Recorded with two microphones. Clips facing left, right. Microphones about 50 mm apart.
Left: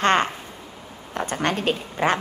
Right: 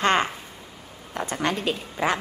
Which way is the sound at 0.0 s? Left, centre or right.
Left.